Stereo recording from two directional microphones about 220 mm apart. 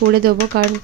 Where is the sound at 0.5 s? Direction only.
45° right (ahead or behind).